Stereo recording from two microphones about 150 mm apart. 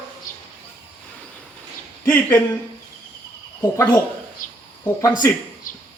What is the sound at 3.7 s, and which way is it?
Speech, 15° left (ahead or behind).